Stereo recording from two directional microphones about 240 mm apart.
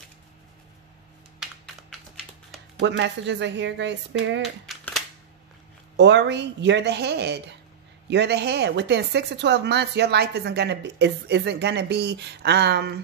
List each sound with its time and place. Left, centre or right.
1.4 s typing: centre
2.8 s a woman's voice: right
4.4 s a sound: centre
5.9 s a woman's voice: right